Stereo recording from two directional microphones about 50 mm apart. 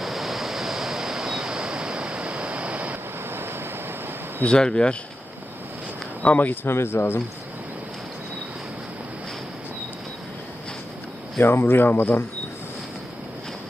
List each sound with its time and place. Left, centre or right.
0.0 s waves: centre; by 3.0 s right
3.2 s a sound: right
4.4 s speech: centre
6.2 s speech: left
6.7 s speech: left
11.3 s speech: left